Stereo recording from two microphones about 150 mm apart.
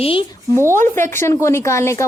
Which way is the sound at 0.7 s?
15° left (ahead or behind).